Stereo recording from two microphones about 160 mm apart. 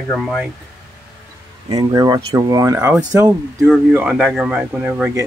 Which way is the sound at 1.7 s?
20° right (ahead or behind).